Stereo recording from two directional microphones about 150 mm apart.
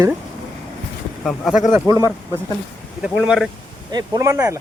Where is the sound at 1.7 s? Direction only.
15° right (ahead or behind).